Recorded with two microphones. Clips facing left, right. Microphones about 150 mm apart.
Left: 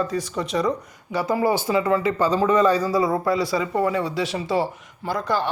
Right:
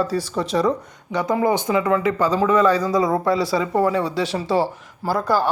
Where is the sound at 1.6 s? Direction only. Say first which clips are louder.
Right 1 dB; 25° left (ahead or behind).